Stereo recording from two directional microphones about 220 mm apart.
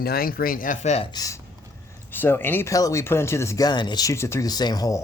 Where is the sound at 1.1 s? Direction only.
15° left (ahead or behind).